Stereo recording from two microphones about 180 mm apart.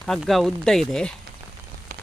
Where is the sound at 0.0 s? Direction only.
Centre (ahead or behind).